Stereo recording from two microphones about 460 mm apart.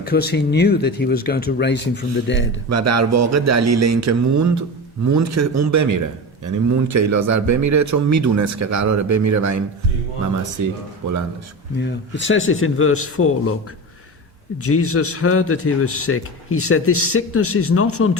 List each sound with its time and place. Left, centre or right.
0.0 s a man's voice: left
2.6 s a man's voice: right
10.6 s a man's voice: right
11.8 s a man's voice: left
14.6 s a man's voice: left